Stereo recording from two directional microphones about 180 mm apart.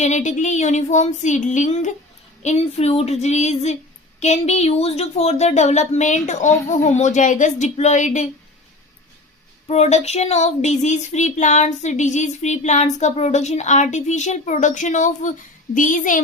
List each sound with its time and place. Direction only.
0.0 s speech: 40° left (ahead or behind)
9.6 s speech: 35° left (ahead or behind)